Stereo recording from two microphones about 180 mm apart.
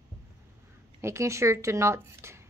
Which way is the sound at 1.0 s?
15° right (ahead or behind).